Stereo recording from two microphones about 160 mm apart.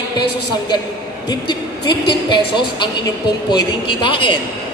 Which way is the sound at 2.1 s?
30° left (ahead or behind).